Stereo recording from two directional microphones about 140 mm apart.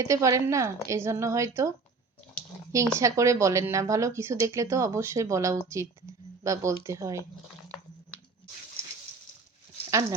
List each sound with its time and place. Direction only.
0.0 s speech: 20° right (ahead or behind)
3.0 s speech: 20° right (ahead or behind)
9.9 s speech: 20° right (ahead or behind)